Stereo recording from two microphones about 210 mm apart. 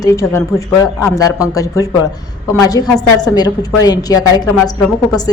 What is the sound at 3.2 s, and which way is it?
A woman's voice, 20° left (ahead or behind).